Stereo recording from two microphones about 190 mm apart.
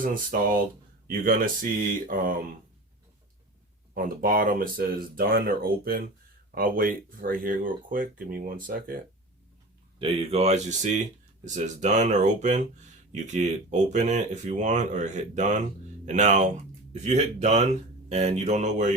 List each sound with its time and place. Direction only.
0.0 s speech: 45° right (ahead or behind)
3.9 s speech: 45° right (ahead or behind)
10.0 s speech: 30° right (ahead or behind)